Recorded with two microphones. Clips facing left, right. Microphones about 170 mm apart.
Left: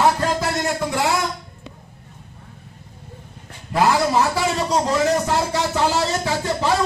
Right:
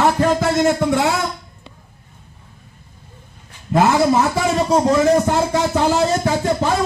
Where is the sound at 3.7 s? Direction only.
55° right (ahead or behind).